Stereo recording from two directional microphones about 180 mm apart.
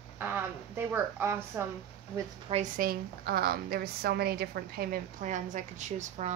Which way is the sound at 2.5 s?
45° right (ahead or behind).